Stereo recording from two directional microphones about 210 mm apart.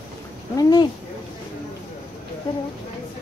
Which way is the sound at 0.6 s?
20° left (ahead or behind).